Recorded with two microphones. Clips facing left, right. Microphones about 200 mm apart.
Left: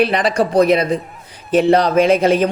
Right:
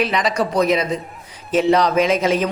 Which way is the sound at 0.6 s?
60° left (ahead or behind).